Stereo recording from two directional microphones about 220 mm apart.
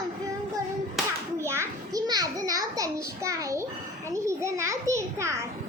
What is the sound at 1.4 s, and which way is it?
A child's voice, 10° right (ahead or behind).